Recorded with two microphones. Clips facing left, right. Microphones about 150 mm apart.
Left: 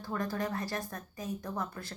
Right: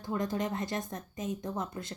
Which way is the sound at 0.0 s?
20° right (ahead or behind).